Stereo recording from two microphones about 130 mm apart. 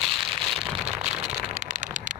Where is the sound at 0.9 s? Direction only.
60° right (ahead or behind).